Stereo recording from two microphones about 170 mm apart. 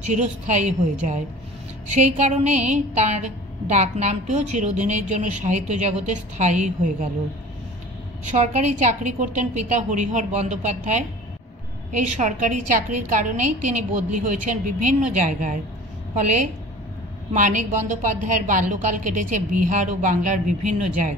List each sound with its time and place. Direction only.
0.0 s a woman's voice: 45° right (ahead or behind)
8.3 s a woman's voice: 45° right (ahead or behind)